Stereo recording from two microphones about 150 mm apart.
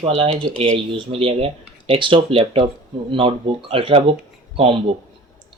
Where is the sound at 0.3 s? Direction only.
5° left (ahead or behind).